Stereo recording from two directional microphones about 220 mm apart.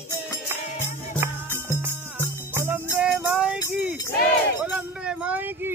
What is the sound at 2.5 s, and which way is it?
Music, 10° right (ahead or behind).